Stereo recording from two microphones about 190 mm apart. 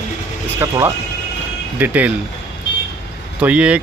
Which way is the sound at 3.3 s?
5° right (ahead or behind).